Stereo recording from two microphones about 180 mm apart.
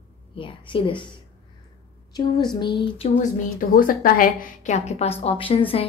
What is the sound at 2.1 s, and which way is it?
Speech, 25° left (ahead or behind).